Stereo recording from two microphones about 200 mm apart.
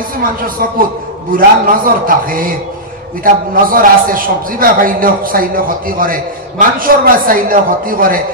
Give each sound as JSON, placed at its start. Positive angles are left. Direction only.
{"t": 0.2, "sound": "a man's voice", "side_deg": -45}